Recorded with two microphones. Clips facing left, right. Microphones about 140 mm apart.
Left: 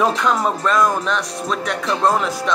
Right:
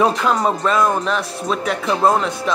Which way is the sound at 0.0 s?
Centre (ahead or behind).